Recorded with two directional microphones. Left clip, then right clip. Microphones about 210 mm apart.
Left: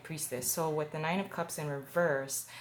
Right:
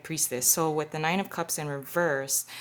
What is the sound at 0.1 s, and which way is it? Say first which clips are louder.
Speech: right 10 dB; 50° right (ahead or behind).